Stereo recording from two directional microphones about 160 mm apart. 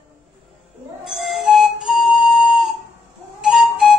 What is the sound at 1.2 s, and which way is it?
Flute, centre (ahead or behind).